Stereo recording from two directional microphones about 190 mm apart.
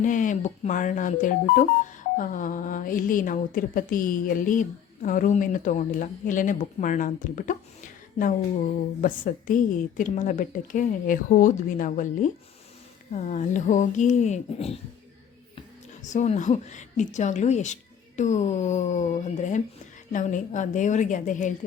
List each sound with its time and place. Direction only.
0.0 s speech: 45° left (ahead or behind)
9.0 s a woman's voice: 45° left (ahead or behind)
16.0 s a woman's voice: 40° left (ahead or behind)